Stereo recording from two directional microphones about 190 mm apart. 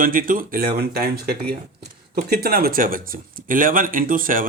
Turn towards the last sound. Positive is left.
turn(degrees=-45)  # may be behind; listen again after turning